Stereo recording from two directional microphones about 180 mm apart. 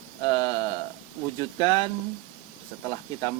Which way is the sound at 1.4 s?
25° left (ahead or behind).